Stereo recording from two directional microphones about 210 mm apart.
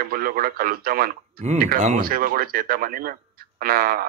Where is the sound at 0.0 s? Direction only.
45° right (ahead or behind).